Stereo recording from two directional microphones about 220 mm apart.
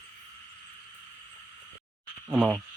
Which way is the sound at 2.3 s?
5° right (ahead or behind).